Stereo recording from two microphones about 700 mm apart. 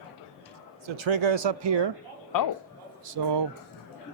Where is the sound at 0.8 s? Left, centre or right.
Right.